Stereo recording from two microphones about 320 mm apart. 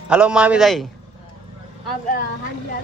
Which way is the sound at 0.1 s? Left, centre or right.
Centre.